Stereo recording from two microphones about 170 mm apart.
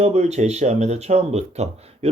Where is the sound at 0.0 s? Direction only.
40° right (ahead or behind).